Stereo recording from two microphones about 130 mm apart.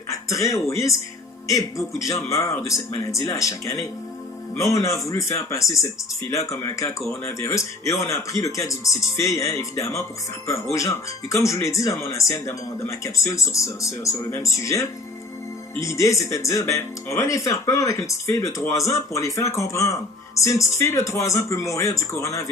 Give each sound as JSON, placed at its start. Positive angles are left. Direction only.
{"t": 0.1, "sound": "a man's voice", "side_deg": 25}